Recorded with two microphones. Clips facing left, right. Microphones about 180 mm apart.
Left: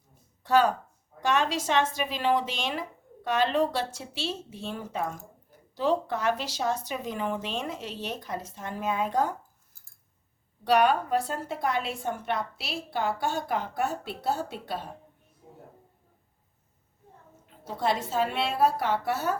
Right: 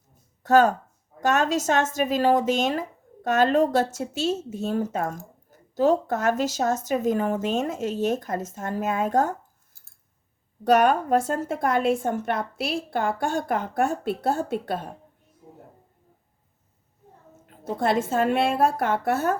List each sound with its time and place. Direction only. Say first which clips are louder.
0.4 s speech: right 5 dB; 45° right (ahead or behind)
10.6 s speech: right 4 dB; 45° right (ahead or behind)
17.7 s speech: right 5 dB; 50° right (ahead or behind)